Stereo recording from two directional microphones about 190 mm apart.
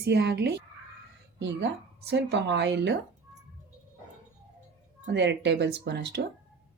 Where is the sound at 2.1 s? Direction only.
65° right (ahead or behind).